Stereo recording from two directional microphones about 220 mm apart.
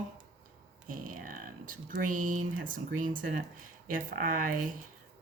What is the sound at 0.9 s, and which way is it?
A woman's voice, 35° right (ahead or behind).